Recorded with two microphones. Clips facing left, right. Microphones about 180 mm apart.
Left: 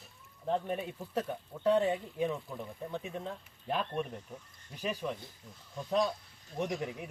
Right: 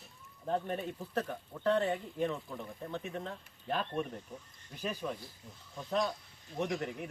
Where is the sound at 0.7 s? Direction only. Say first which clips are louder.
Left 1 dB; 10° left (ahead or behind).